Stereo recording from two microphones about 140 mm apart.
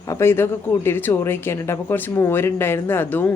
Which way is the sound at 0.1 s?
15° left (ahead or behind).